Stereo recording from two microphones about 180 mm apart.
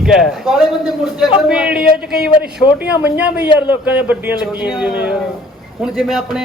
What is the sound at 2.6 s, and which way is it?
Speech, 25° left (ahead or behind).